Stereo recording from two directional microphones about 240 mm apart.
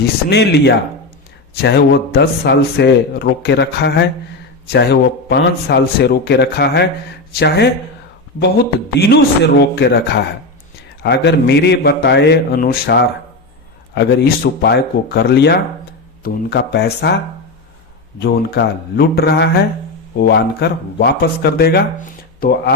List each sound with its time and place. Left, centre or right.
0.3 s speech: left
9.0 s speech: left
18.2 s speech: left